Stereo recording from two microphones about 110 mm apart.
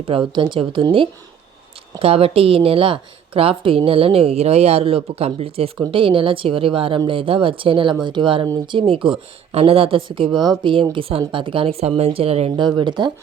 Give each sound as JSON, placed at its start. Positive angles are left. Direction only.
{"t": 0.1, "sound": "speech", "side_deg": -45}
{"t": 2.0, "sound": "a woman's voice", "side_deg": -60}
{"t": 5.9, "sound": "a woman's voice", "side_deg": -55}
{"t": 12.5, "sound": "speech", "side_deg": -45}